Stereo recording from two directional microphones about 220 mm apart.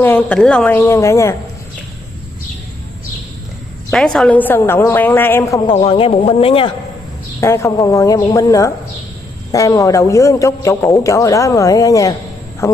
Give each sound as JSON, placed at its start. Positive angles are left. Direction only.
{"t": 0.0, "sound": "a man's voice", "side_deg": 5}
{"t": 3.9, "sound": "a man's voice", "side_deg": 0}
{"t": 5.9, "sound": "speech", "side_deg": 25}
{"t": 7.3, "sound": "a man's voice", "side_deg": 10}